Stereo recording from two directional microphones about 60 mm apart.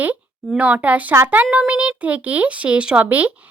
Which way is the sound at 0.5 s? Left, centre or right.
Right.